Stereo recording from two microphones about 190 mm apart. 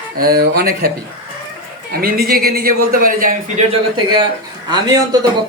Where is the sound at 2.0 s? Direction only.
50° right (ahead or behind).